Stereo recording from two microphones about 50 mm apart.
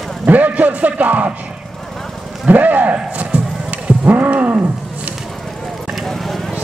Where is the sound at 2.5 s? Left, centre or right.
Right.